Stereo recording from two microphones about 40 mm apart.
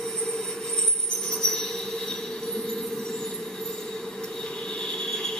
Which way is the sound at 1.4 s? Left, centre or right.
Centre.